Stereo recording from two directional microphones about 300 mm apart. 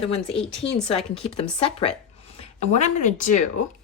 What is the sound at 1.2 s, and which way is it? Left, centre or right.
Speech, centre.